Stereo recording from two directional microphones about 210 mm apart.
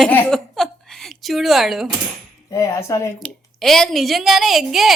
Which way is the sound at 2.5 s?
15° left (ahead or behind).